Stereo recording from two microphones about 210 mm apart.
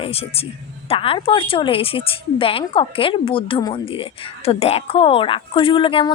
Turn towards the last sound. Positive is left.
turn(degrees=25)  # may be behind; listen again after turning